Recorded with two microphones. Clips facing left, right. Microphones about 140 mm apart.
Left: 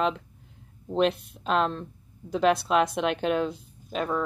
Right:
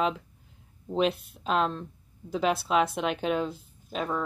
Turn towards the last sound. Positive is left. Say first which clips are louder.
# left 2 dB
turn(degrees=0)  # may be behind; listen again after turning